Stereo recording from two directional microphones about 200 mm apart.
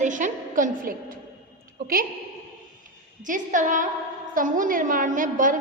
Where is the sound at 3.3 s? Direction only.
40° right (ahead or behind).